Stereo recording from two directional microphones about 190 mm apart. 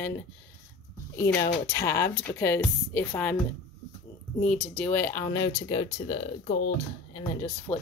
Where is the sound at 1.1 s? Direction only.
15° left (ahead or behind).